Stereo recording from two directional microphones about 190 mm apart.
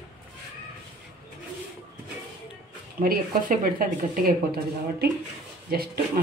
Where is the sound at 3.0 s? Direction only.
50° right (ahead or behind).